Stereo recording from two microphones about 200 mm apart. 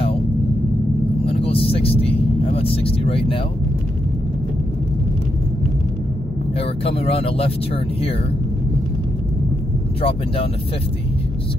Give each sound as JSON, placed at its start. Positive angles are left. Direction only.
{"t": 1.2, "sound": "vehicle", "side_deg": 30}
{"t": 6.6, "sound": "speech", "side_deg": 30}
{"t": 10.0, "sound": "speech", "side_deg": 30}